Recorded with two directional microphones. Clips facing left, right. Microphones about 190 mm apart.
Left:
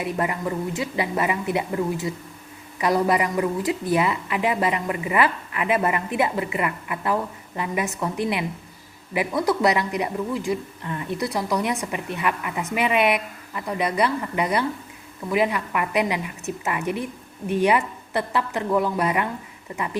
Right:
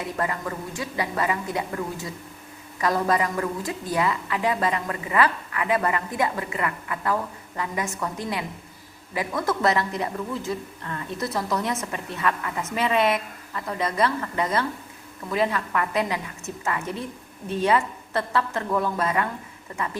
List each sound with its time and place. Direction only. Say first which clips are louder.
0.0 s a woman's voice: left 3 dB; 20° left (ahead or behind)